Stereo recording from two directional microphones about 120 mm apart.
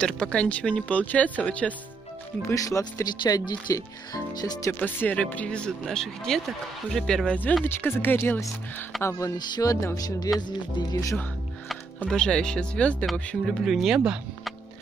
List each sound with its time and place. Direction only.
0.0 s speech: 10° left (ahead or behind)
2.4 s speech: 25° left (ahead or behind)
4.6 s speech: 15° left (ahead or behind)
9.0 s speech: 30° left (ahead or behind)
12.0 s speech: 5° left (ahead or behind)